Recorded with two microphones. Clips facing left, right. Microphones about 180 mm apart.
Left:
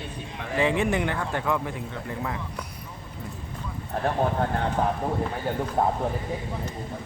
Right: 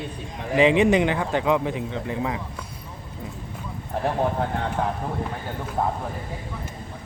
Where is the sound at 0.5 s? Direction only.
20° right (ahead or behind).